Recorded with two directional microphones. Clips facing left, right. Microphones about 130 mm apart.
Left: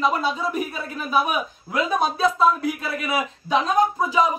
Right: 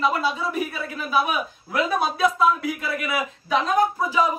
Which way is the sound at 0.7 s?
20° left (ahead or behind).